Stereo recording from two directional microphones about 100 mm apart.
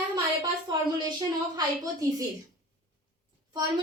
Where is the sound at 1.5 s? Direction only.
35° right (ahead or behind).